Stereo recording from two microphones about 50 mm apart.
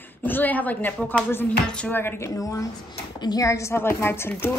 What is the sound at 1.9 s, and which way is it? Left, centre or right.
Speech, left.